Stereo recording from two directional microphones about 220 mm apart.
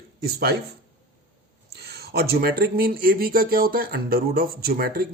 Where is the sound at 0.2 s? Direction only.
45° right (ahead or behind).